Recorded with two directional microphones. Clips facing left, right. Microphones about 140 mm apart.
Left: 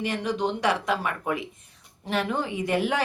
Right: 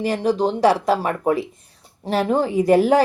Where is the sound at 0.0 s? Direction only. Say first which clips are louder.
Right 7 dB; 35° right (ahead or behind).